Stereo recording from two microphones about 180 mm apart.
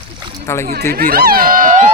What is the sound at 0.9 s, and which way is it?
Speech, 55° right (ahead or behind).